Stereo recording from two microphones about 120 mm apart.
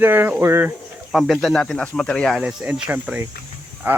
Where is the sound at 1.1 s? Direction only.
Centre (ahead or behind).